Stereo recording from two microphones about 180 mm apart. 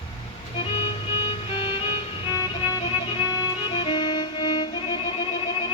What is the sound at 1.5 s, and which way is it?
Music, 25° left (ahead or behind).